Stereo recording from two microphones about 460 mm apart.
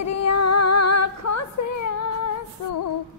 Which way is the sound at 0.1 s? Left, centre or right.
Left.